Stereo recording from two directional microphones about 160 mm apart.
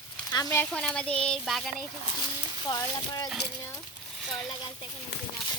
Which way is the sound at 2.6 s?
25° left (ahead or behind).